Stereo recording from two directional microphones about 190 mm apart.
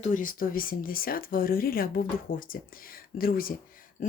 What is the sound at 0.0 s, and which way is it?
Speech, 45° left (ahead or behind).